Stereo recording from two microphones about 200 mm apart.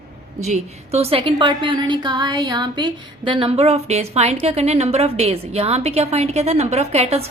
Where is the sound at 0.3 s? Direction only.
35° right (ahead or behind).